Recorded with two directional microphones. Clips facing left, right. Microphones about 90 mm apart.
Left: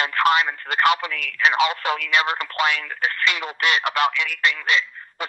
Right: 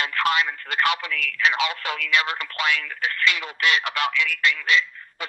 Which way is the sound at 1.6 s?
35° left (ahead or behind).